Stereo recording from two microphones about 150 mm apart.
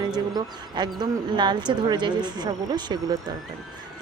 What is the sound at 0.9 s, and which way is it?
Speech, 30° right (ahead or behind).